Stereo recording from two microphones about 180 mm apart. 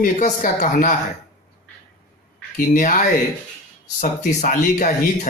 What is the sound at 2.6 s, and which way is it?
Speech, 45° left (ahead or behind).